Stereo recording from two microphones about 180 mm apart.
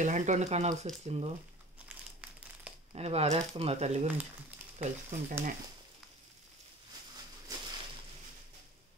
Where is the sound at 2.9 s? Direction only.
35° right (ahead or behind).